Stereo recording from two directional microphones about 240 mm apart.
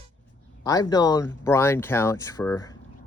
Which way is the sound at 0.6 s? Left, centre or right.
Centre.